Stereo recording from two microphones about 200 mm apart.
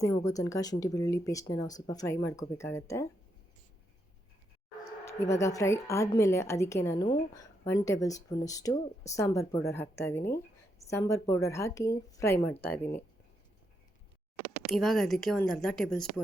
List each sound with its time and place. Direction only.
0.0 s a woman's voice: 20° left (ahead or behind)
5.0 s a woman's voice: 15° left (ahead or behind)
14.7 s speech: centre (ahead or behind)